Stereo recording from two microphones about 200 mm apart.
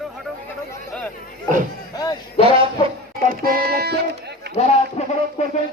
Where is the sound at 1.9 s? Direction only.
20° left (ahead or behind).